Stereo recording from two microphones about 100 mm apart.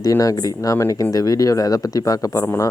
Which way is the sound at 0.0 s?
35° left (ahead or behind).